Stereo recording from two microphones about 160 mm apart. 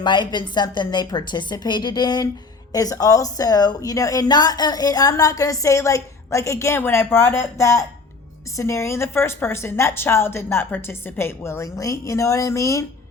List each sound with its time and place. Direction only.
0.0 s a woman's voice: 30° left (ahead or behind)